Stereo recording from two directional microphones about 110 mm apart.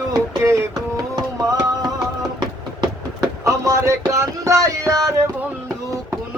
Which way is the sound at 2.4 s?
35° right (ahead or behind).